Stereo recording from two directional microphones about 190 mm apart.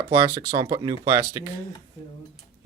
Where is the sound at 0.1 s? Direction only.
20° right (ahead or behind).